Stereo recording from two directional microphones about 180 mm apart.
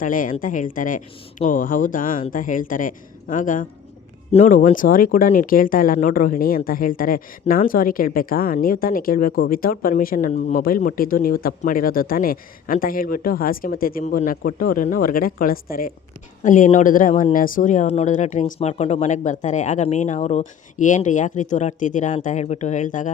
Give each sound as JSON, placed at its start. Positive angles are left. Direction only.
{"t": 0.0, "sound": "speech", "side_deg": 50}